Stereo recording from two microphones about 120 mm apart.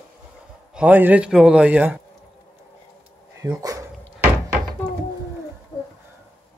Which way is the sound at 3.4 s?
30° right (ahead or behind).